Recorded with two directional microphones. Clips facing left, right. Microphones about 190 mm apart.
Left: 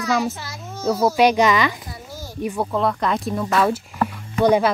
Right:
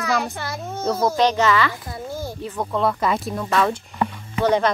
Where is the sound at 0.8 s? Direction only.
5° left (ahead or behind).